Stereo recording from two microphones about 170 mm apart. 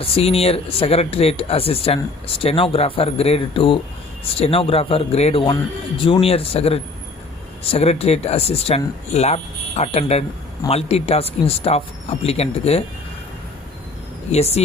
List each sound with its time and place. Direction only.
0.0 s speech: 35° left (ahead or behind)
14.3 s speech: 40° left (ahead or behind)